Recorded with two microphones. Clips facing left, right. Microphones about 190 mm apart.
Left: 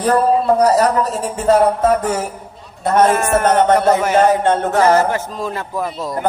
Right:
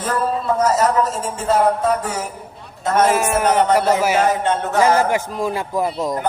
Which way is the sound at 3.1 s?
10° right (ahead or behind).